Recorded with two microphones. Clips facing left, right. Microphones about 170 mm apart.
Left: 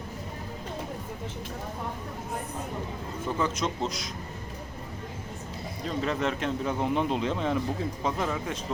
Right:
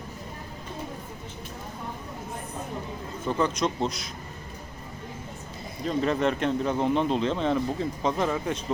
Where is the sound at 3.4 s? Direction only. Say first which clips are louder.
Right 4 dB; 5° left (ahead or behind).